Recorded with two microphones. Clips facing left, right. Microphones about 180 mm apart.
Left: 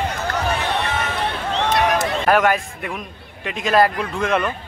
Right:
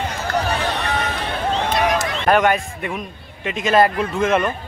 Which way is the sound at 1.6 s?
65° left (ahead or behind).